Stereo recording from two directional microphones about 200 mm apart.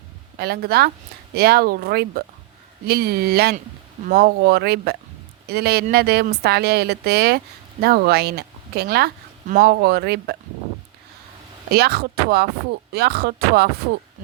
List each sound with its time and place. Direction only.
0.3 s speech: 55° right (ahead or behind)
11.7 s speech: 50° right (ahead or behind)